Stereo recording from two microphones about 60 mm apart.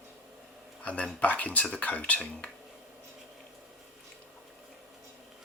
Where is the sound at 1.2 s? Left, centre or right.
Left.